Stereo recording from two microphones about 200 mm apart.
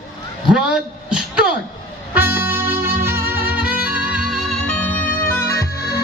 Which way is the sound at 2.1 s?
10° right (ahead or behind).